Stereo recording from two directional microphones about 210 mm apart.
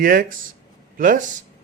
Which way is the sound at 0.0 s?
40° right (ahead or behind).